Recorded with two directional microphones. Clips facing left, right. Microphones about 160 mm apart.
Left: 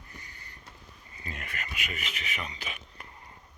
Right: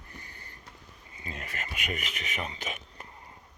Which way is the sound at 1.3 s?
25° right (ahead or behind).